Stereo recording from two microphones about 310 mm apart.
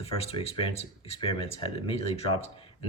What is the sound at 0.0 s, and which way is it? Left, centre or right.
Speech, centre.